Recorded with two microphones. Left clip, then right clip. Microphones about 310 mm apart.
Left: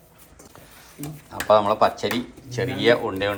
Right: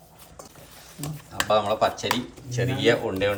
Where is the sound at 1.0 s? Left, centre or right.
Centre.